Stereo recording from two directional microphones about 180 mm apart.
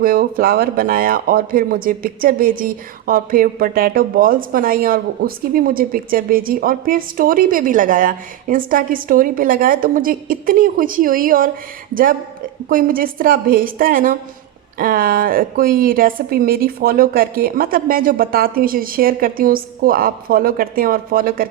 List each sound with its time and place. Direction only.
0.0 s speech: 55° right (ahead or behind)
12.6 s speech: 50° right (ahead or behind)